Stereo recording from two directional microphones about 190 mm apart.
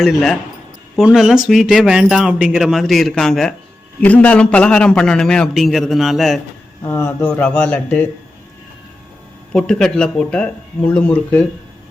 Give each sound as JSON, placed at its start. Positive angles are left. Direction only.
{"t": 0.0, "sound": "speech", "side_deg": 0}
{"t": 6.8, "sound": "speech", "side_deg": 15}
{"t": 9.5, "sound": "speech", "side_deg": 5}